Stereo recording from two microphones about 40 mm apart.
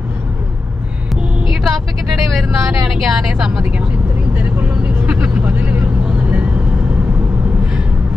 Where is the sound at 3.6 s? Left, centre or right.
Right.